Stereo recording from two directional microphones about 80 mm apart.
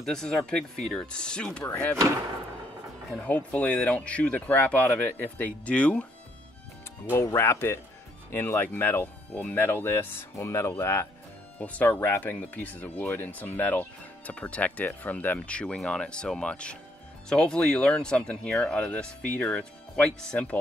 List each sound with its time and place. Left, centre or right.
0.0 s speech: centre
3.2 s speech: centre
7.2 s speech: left
11.5 s speech: centre